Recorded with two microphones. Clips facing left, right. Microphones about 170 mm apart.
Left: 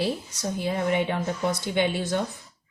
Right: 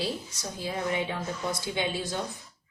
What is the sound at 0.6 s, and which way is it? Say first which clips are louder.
A woman's voice: left 5 dB; 60° left (ahead or behind).